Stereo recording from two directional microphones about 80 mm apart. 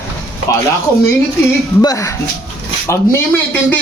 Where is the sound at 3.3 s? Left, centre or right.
Left.